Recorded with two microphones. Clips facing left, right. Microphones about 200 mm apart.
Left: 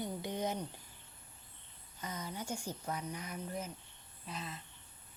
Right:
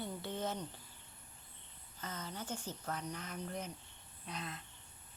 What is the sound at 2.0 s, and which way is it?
Speech, 10° left (ahead or behind).